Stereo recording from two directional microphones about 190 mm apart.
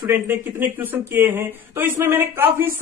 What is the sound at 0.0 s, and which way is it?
Speech, 10° right (ahead or behind).